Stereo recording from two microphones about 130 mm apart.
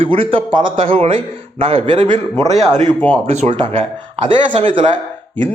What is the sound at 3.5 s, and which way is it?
A man's voice, 40° right (ahead or behind).